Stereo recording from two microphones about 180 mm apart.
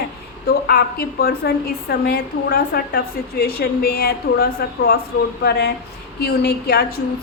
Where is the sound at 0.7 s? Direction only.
60° left (ahead or behind).